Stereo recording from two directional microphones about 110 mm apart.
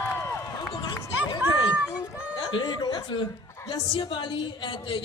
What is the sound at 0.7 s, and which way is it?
Run, 45° left (ahead or behind).